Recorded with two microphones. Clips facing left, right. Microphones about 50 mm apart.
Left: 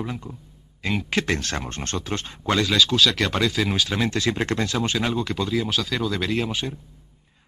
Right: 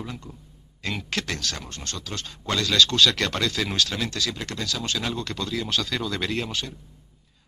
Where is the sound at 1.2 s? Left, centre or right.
Left; by 6.5 s centre.